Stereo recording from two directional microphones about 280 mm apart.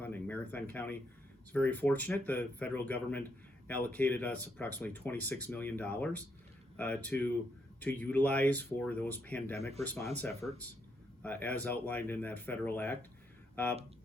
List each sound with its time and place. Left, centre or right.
0.0 s a sound: centre
1.5 s speech: centre
9.6 s speech: right
9.8 s speech: centre